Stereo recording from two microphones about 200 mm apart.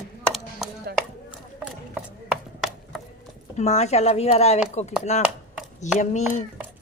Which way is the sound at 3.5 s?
35° left (ahead or behind).